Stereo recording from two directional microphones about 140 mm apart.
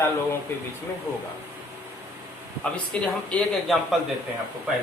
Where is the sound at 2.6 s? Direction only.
10° left (ahead or behind).